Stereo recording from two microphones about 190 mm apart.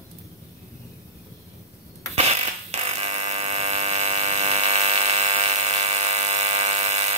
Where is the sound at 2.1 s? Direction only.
35° right (ahead or behind).